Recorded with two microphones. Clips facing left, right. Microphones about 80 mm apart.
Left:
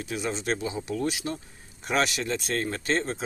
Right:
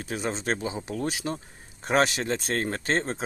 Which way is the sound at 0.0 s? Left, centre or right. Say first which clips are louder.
Even; right.